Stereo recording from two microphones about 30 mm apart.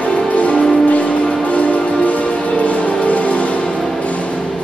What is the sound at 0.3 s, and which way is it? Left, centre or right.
Music, left.